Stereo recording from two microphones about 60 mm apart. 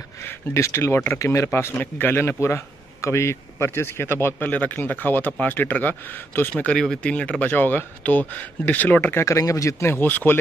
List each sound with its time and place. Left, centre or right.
0.2 s speech: left
1.5 s speech: left
4.5 s speech: left
6.6 s speech: centre
9.2 s speech: left
9.8 s speech: left